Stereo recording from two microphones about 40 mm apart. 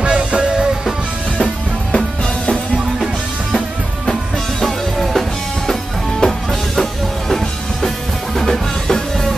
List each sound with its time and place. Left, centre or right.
0.0 s music: right
4.0 s music: centre